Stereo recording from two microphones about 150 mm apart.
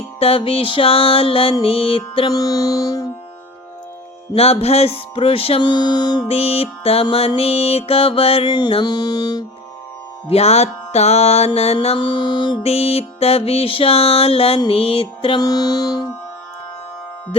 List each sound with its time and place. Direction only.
0.2 s music: 40° left (ahead or behind)
2.4 s music: 25° left (ahead or behind)
4.4 s music: 40° left (ahead or behind)
6.2 s music: 40° left (ahead or behind)
10.2 s music: 45° left (ahead or behind)
15.4 s music: 25° left (ahead or behind)